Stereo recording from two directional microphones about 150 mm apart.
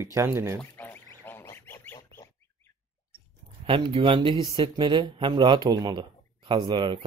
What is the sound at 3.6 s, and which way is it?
Speech, 35° right (ahead or behind).